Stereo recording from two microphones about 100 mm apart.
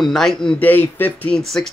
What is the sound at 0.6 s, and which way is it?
Speech, 20° left (ahead or behind).